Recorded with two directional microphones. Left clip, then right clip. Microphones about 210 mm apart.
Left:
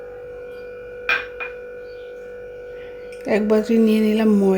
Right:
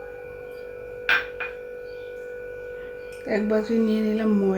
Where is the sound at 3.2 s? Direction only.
35° left (ahead or behind).